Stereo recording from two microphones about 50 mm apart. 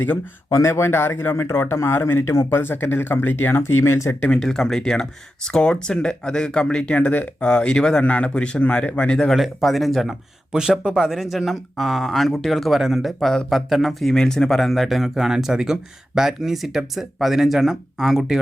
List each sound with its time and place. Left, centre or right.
0.5 s speech: left
3.5 s speech: left
4.4 s speech: centre; by 9.1 s left
9.3 s speech: centre
10.5 s speech: centre